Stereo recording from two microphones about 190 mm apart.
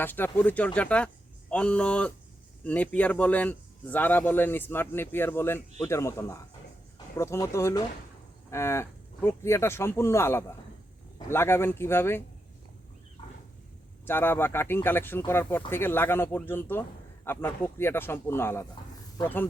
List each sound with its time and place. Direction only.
0.0 s a man's voice: 10° left (ahead or behind)
14.0 s a man's voice: 10° left (ahead or behind)